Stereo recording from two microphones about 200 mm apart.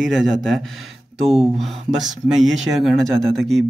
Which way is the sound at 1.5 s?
Centre (ahead or behind).